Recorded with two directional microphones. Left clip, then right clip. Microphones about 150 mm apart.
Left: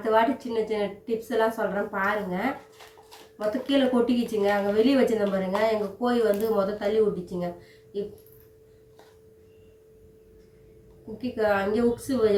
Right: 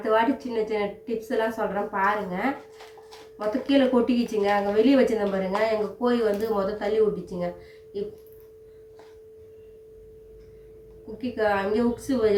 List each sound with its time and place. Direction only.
0.0 s a woman's voice: 15° right (ahead or behind)
11.2 s a woman's voice: 15° right (ahead or behind)